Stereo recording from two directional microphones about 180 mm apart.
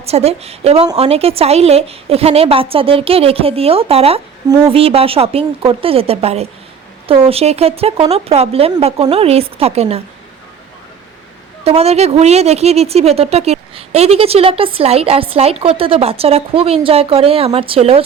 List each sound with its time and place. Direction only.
0.0 s a woman's voice: 35° right (ahead or behind)
11.6 s a woman's voice: 35° right (ahead or behind)